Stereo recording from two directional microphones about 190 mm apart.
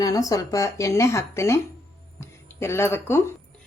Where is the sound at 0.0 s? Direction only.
20° left (ahead or behind).